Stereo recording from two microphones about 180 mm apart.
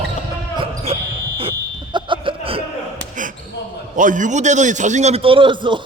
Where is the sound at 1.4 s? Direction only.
30° right (ahead or behind).